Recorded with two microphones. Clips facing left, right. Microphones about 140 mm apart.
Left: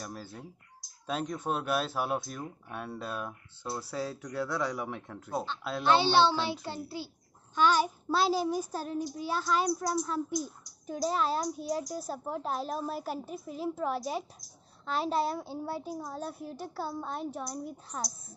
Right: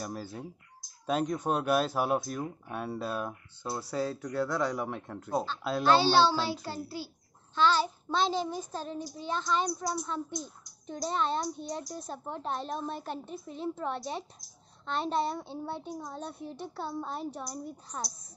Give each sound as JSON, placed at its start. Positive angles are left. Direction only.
{"t": 0.0, "sound": "a child's voice", "side_deg": -5}
{"t": 5.9, "sound": "a child's voice", "side_deg": 20}